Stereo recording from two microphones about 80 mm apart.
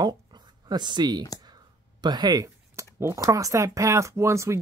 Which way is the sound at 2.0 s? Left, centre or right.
Right.